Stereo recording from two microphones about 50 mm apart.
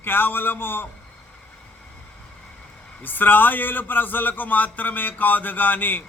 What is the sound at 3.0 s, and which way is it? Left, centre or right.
A man's voice, left.